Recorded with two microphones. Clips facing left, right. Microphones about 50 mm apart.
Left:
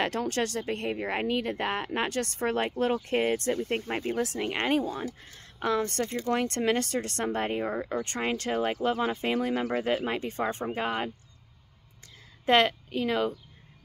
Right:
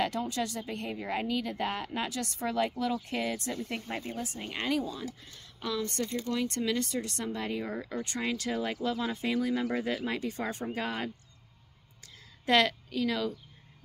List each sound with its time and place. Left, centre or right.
0.0 s speech: left
4.2 s speech: left
4.5 s speech: left
8.0 s speech: left
12.4 s a woman's voice: left